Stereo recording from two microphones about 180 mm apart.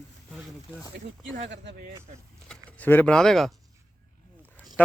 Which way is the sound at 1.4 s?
75° right (ahead or behind).